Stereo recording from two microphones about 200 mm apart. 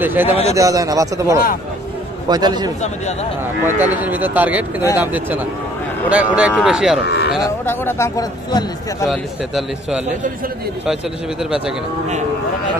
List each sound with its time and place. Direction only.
0.0 s a man's voice: 10° right (ahead or behind)
3.8 s a man's voice: 10° right (ahead or behind)
7.4 s speech: 10° left (ahead or behind)
9.1 s a man's voice: centre (ahead or behind)